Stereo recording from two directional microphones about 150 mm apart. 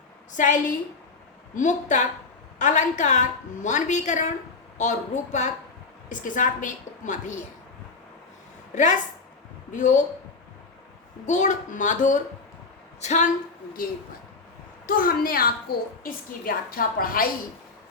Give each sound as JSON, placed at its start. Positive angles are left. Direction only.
{"t": 0.3, "sound": "a woman's voice", "side_deg": 60}
{"t": 8.7, "sound": "a woman's voice", "side_deg": 55}
{"t": 11.3, "sound": "a woman's voice", "side_deg": 55}
{"t": 14.8, "sound": "a woman's voice", "side_deg": 70}